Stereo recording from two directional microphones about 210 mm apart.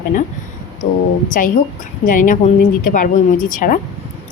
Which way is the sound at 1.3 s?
40° left (ahead or behind).